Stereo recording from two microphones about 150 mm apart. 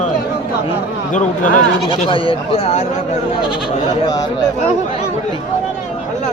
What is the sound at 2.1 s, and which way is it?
Speech, 35° left (ahead or behind).